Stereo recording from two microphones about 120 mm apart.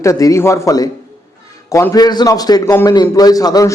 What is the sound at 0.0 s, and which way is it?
A man's voice, 25° left (ahead or behind).